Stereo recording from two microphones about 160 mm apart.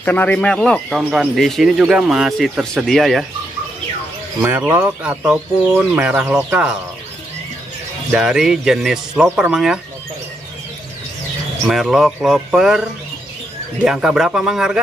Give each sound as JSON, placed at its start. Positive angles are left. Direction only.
{"t": 0.0, "sound": "speech", "side_deg": 10}
{"t": 4.4, "sound": "speech", "side_deg": -10}
{"t": 8.1, "sound": "speech", "side_deg": -5}
{"t": 11.6, "sound": "speech", "side_deg": 0}